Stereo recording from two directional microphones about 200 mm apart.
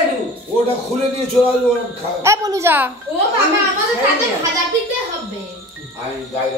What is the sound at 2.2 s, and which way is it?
Speech, 15° right (ahead or behind).